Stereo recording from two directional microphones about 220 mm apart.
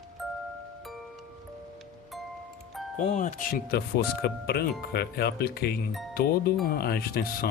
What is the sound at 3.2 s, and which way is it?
Speech, 35° left (ahead or behind).